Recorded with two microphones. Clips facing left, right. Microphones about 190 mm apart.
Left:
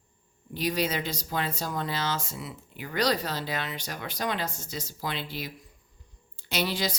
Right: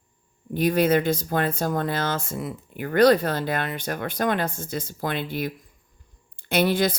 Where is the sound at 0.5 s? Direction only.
55° right (ahead or behind).